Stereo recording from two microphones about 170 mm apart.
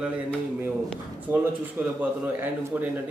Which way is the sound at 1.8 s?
10° right (ahead or behind).